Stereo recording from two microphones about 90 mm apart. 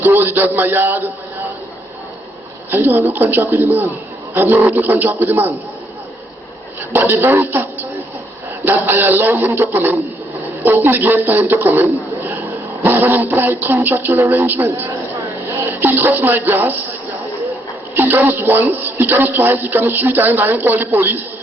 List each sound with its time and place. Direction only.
0.0 s a man's voice: 25° right (ahead or behind)
2.6 s speech: 20° right (ahead or behind)
6.9 s speech: 25° right (ahead or behind)
17.9 s speech: 25° right (ahead or behind)